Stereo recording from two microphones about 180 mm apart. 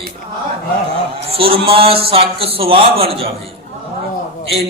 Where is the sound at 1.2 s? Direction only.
30° right (ahead or behind).